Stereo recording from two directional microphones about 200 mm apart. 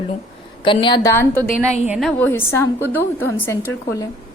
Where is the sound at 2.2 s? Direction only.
10° left (ahead or behind).